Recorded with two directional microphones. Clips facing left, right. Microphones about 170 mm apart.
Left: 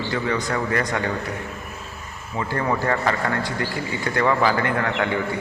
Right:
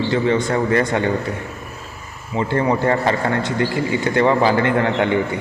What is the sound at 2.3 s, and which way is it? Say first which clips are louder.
A man's voice: right 5 dB; 25° right (ahead or behind).